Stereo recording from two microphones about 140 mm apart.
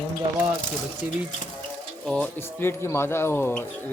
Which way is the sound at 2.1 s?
10° left (ahead or behind).